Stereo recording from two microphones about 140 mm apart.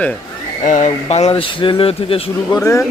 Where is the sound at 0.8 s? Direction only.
45° left (ahead or behind).